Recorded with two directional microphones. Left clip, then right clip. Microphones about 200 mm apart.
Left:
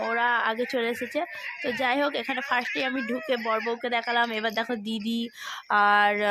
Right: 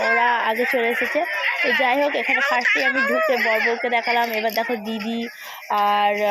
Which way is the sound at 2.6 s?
50° right (ahead or behind).